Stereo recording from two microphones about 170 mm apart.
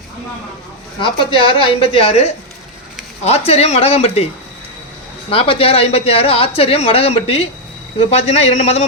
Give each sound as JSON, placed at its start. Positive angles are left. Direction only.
{"t": 0.9, "sound": "speech", "side_deg": 30}
{"t": 5.3, "sound": "speech", "side_deg": 30}